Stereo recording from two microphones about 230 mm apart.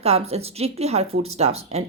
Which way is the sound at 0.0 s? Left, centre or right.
Right.